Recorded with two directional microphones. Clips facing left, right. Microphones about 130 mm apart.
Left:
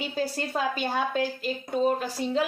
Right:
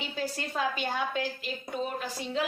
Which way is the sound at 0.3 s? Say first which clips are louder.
Left 3 dB; 40° left (ahead or behind).